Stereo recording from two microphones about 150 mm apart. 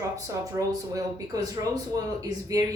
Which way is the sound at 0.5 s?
20° right (ahead or behind).